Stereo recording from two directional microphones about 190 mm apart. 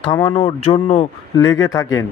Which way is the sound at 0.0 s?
25° left (ahead or behind).